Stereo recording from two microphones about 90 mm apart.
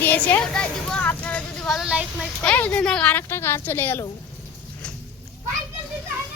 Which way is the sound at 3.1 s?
25° left (ahead or behind).